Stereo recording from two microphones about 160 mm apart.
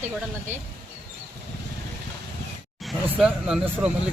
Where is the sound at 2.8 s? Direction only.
Centre (ahead or behind).